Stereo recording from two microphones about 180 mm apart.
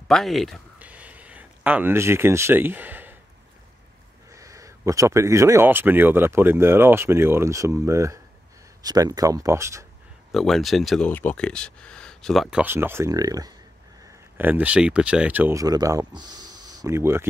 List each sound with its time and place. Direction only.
0.1 s a sound: centre (ahead or behind)
4.3 s speech: 15° right (ahead or behind)
10.3 s speech: centre (ahead or behind); by 13.5 s 20° right (ahead or behind)
14.3 s speech: 10° right (ahead or behind)